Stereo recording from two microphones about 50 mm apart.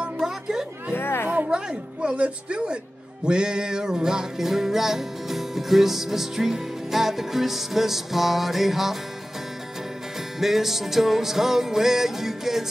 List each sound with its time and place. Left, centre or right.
0.2 s chatter: centre
0.9 s a sound: left
1.5 s a woman's voice: centre
3.3 s music: centre
10.4 s music: centre